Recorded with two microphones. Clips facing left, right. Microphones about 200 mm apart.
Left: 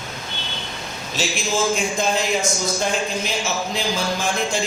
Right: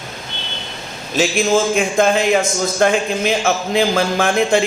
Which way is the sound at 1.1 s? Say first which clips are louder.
Right 9 dB; 55° right (ahead or behind).